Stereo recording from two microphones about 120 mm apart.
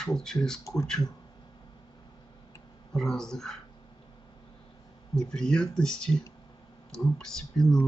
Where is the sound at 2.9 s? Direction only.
5° left (ahead or behind).